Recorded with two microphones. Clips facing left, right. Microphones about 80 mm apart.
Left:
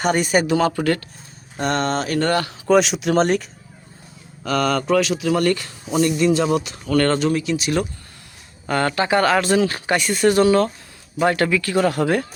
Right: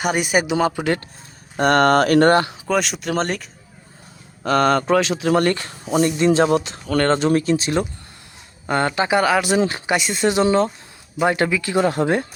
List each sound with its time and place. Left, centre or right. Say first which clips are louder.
0.0 s speech: left 1 dB; centre
1.5 s speech: right 7 dB; right
2.3 s speech: right 4 dB; right
2.6 s speech: left 5 dB; centre
4.4 s speech: right 3 dB; right